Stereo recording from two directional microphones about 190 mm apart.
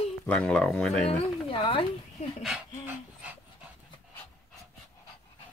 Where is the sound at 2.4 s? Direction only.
5° right (ahead or behind).